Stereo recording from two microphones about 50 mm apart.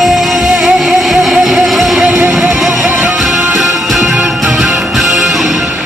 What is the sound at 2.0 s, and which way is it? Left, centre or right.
Music, centre.